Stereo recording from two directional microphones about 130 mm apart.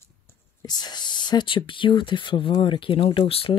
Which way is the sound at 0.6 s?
30° left (ahead or behind).